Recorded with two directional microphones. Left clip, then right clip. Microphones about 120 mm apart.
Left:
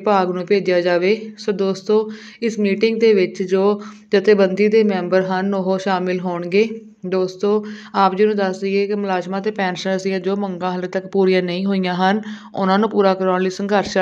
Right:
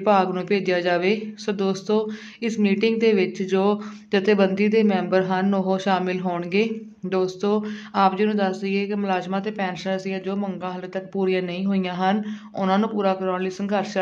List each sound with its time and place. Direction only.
0.0 s speech: 25° left (ahead or behind)
7.9 s speech: 30° left (ahead or behind)